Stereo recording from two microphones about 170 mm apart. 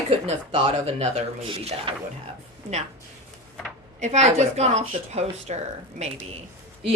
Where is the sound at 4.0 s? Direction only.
45° right (ahead or behind).